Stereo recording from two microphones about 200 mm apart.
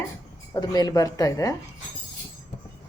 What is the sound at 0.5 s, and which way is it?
A woman's voice, 20° left (ahead or behind).